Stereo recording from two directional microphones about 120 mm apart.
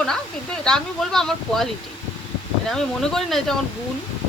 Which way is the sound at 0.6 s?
5° left (ahead or behind).